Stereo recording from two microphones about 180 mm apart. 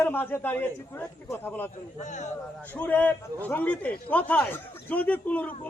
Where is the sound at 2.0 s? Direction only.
40° left (ahead or behind).